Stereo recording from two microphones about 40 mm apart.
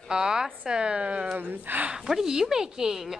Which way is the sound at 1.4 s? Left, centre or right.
Right.